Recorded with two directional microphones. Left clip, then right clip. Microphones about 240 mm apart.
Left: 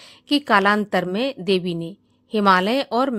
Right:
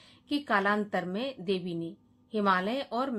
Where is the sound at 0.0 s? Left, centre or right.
Left.